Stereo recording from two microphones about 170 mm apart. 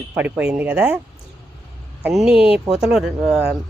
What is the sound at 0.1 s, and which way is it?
Speech, 10° right (ahead or behind).